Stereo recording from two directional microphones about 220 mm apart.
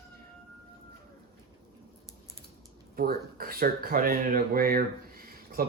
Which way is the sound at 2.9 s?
40° right (ahead or behind).